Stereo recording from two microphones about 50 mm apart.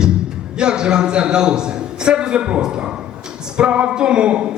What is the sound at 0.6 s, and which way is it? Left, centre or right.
A man's voice, centre.